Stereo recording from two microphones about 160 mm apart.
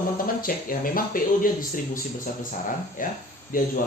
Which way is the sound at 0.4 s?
60° left (ahead or behind).